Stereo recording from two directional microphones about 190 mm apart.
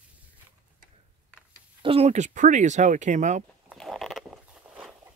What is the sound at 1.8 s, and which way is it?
Speech, 30° right (ahead or behind).